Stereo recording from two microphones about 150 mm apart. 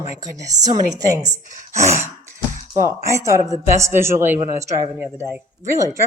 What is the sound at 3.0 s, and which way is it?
Speech, 20° right (ahead or behind).